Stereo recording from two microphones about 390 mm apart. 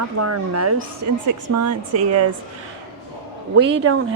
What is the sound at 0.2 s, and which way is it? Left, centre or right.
Speech, right.